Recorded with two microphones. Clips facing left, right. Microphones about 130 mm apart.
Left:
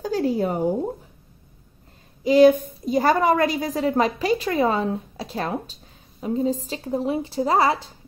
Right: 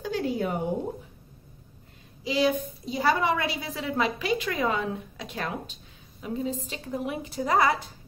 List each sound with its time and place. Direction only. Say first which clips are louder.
0.0 s a woman's voice: left 6 dB; 40° left (ahead or behind)
2.2 s a woman's voice: left 11 dB; 50° left (ahead or behind); by 7.9 s 30° left (ahead or behind)